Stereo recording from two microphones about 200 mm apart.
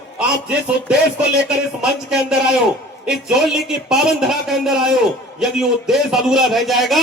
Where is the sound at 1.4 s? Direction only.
5° right (ahead or behind).